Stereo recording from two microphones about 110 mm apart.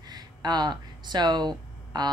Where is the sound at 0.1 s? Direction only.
40° right (ahead or behind).